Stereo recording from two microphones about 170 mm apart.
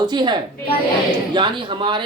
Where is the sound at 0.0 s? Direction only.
25° right (ahead or behind).